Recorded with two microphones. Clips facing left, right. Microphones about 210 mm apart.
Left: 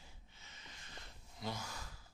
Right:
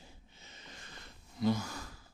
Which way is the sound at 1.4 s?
60° right (ahead or behind).